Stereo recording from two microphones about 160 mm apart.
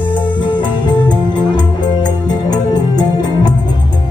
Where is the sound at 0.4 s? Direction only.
30° left (ahead or behind).